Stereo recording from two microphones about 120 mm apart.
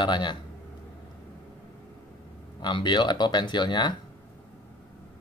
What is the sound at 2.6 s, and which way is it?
Speech, 40° left (ahead or behind).